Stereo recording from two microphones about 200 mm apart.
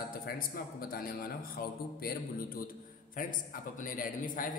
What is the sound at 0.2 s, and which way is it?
A man's voice, 50° left (ahead or behind).